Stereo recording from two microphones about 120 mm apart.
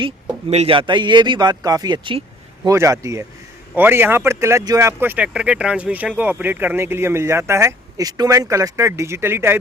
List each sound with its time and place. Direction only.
0.5 s speech: 55° right (ahead or behind); by 9.6 s 20° right (ahead or behind)